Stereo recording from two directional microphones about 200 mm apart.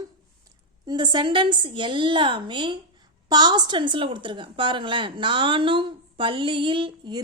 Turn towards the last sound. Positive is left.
turn(degrees=-25)  # may be behind; listen again after turning